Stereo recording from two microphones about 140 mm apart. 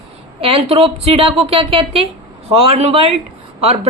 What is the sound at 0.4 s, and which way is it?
Speech, 40° right (ahead or behind).